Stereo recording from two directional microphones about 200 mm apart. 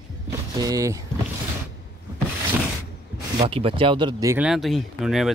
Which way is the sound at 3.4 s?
30° right (ahead or behind).